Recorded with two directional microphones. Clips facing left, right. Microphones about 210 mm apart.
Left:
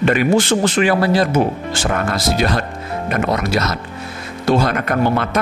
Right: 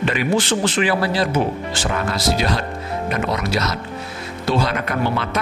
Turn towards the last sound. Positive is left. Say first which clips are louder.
# left 4 dB
turn(degrees=50)  # may be behind; listen again after turning